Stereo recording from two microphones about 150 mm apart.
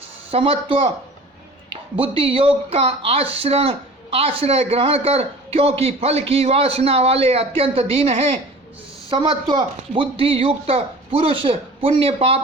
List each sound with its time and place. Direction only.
0.3 s a woman's voice: 40° right (ahead or behind)